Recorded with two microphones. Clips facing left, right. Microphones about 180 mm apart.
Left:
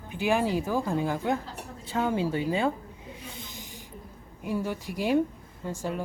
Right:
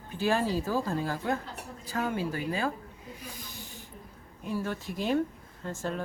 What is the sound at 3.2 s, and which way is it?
Snake, 25° left (ahead or behind).